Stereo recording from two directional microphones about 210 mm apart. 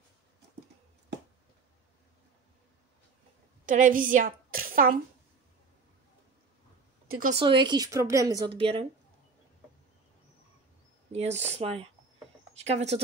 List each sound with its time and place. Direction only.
3.6 s a woman's voice: 40° right (ahead or behind)
7.3 s speech: 20° right (ahead or behind)
11.1 s speech: 30° right (ahead or behind)